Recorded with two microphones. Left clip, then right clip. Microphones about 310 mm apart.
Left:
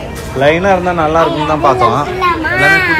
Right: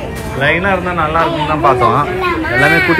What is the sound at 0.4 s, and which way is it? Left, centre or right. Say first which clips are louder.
Speech: left 3 dB; centre.